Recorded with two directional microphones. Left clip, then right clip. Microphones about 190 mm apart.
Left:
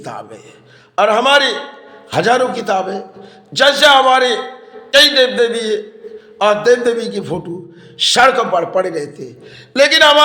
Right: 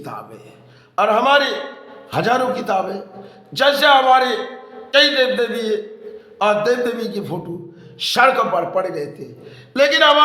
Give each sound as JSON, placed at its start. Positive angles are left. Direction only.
{"t": 0.0, "sound": "a man's voice", "side_deg": 20}